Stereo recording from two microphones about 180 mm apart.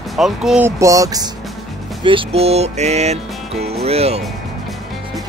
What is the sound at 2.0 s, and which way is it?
Music, 30° right (ahead or behind).